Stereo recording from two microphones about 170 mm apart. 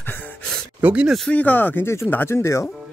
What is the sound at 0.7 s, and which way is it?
Speech, 10° right (ahead or behind).